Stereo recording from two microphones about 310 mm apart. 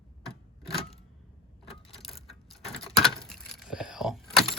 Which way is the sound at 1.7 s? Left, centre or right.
Centre.